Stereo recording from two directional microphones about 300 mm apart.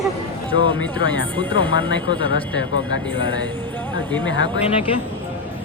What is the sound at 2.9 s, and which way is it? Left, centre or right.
Speech, left.